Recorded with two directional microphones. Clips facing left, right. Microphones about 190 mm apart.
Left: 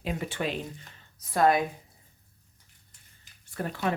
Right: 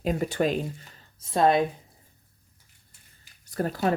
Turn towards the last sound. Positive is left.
turn(degrees=-40)  # may be behind; listen again after turning